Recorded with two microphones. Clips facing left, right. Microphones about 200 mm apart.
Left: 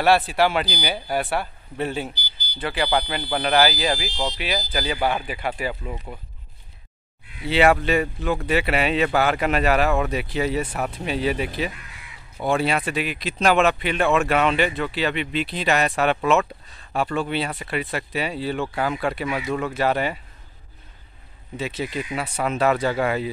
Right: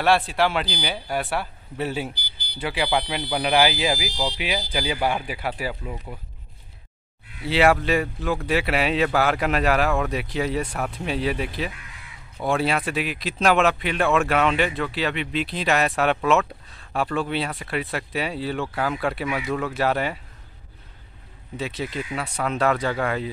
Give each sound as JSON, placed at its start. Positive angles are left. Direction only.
{"t": 0.0, "sound": "speech", "side_deg": 5}
{"t": 2.1, "sound": "smoke detector", "side_deg": -60}
{"t": 2.6, "sound": "speech", "side_deg": -10}
{"t": 7.4, "sound": "speech", "side_deg": 0}
{"t": 21.5, "sound": "speech", "side_deg": 0}